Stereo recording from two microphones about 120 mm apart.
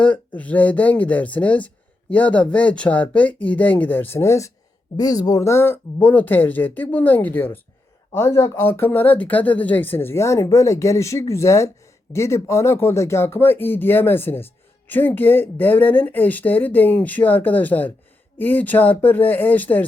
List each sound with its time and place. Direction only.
0.0 s speech: 10° left (ahead or behind)